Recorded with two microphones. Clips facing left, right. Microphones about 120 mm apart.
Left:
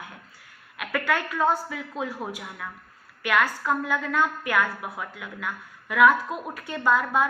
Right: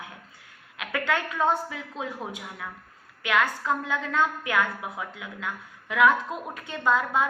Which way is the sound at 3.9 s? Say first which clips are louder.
Left 1 dB; 25° right (ahead or behind).